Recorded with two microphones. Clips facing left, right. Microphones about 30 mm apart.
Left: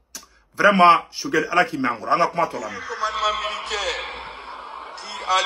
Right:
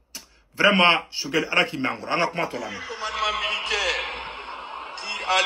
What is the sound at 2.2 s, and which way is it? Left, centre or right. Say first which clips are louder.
Speech: left 4 dB; right.